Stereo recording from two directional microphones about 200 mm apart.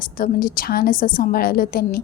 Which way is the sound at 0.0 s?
45° left (ahead or behind).